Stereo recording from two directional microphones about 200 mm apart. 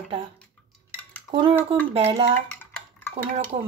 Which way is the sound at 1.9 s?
30° right (ahead or behind).